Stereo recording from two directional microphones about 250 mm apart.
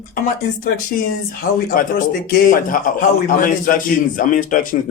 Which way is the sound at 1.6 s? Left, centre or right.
Left.